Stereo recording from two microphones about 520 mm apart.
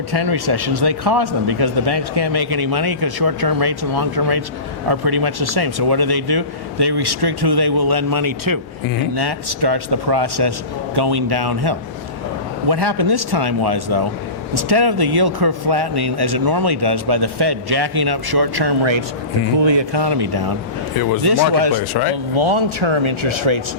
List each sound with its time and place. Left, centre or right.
0.1 s speech: right
21.5 s speech: right
22.4 s speech: right